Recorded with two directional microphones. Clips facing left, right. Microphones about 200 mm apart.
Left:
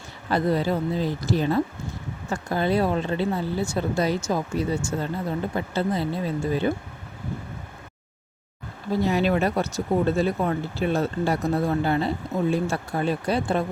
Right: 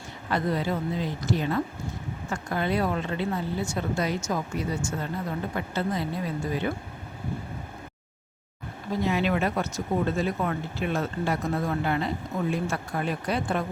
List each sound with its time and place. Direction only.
0.3 s speech: 35° left (ahead or behind)
9.0 s speech: 35° left (ahead or behind)